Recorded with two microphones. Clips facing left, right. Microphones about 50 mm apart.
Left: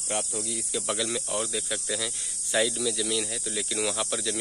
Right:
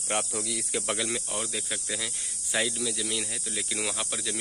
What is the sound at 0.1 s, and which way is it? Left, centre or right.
Speech, right.